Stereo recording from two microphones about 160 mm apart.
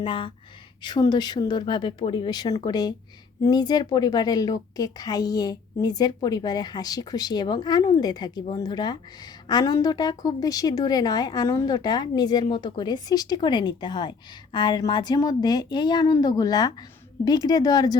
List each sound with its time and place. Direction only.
0.0 s a woman's voice: 30° left (ahead or behind)